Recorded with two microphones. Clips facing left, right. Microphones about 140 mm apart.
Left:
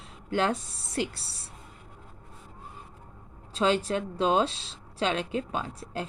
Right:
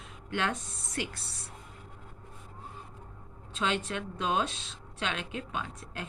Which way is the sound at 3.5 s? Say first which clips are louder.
Left 7 dB; 35° left (ahead or behind).